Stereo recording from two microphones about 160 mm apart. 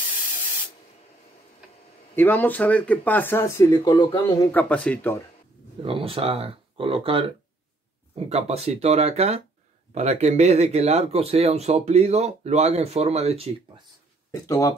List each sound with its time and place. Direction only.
2.1 s speech: 10° left (ahead or behind); by 4.5 s 25° left (ahead or behind)
4.5 s speech: 10° left (ahead or behind)
5.8 s speech: 35° right (ahead or behind)
8.3 s speech: 40° right (ahead or behind)
14.4 s speech: 20° left (ahead or behind)